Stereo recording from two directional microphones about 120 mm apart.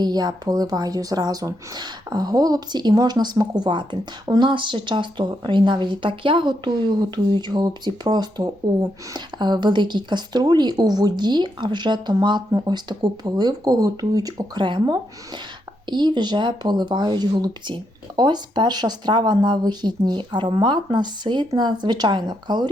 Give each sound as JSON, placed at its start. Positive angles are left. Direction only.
{"t": 0.0, "sound": "speech", "side_deg": -35}